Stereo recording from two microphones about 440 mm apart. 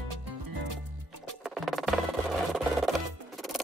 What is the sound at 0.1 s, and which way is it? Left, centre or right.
Music, right.